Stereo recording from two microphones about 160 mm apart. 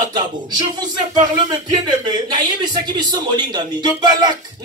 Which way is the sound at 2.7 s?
25° right (ahead or behind).